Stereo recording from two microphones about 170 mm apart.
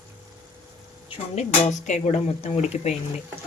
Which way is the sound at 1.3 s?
40° left (ahead or behind).